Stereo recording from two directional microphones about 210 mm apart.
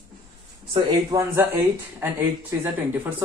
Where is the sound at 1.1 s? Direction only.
10° right (ahead or behind).